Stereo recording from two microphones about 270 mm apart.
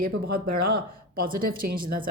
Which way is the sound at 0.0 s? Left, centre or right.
Right.